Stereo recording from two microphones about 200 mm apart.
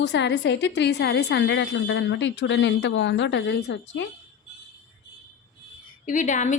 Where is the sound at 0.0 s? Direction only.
60° left (ahead or behind).